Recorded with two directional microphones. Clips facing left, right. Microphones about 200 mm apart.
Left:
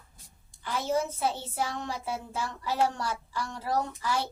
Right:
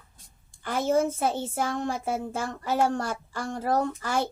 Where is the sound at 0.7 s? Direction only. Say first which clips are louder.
Right 5 dB; 50° right (ahead or behind).